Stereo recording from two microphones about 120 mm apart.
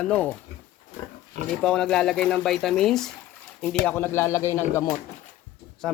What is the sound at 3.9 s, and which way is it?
Speech, 15° left (ahead or behind).